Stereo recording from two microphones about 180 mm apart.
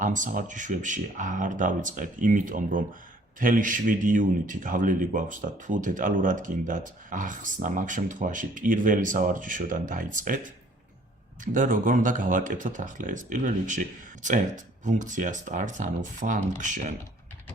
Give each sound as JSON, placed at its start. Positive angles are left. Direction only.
{"t": 0.0, "sound": "a man's voice", "side_deg": -45}
{"t": 11.5, "sound": "a man's voice", "side_deg": -45}